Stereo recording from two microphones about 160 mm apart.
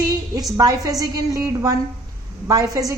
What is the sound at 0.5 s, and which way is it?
A woman's voice, 20° right (ahead or behind).